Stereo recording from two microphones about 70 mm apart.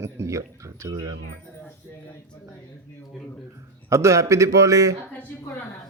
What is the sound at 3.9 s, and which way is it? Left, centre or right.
A man's voice, right.